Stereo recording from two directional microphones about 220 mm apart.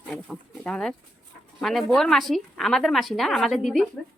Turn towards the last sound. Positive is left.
turn(degrees=0)  # may be behind; listen again after turning